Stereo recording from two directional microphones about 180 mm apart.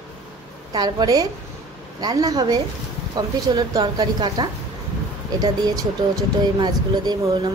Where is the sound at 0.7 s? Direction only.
20° right (ahead or behind).